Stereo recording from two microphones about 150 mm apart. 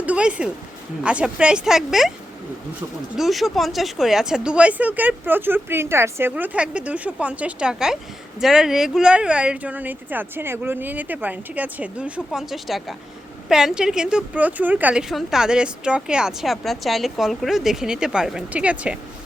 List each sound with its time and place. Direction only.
0.0 s speech: 10° right (ahead or behind)
3.2 s speech: centre (ahead or behind)